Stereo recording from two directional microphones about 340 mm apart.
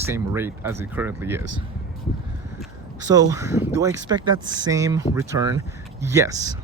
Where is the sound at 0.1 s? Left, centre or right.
Centre.